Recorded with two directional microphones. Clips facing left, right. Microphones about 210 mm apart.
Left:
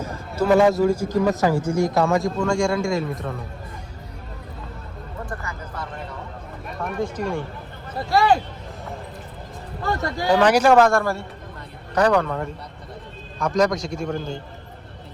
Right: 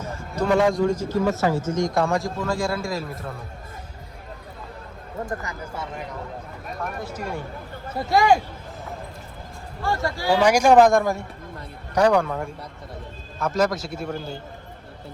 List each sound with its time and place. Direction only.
0.0 s speech: 5° left (ahead or behind)
6.8 s a man's voice: 10° right (ahead or behind)
10.2 s a man's voice: 10° right (ahead or behind)